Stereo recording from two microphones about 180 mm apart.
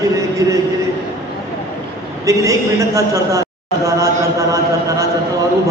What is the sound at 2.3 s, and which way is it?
A man's voice, 15° right (ahead or behind).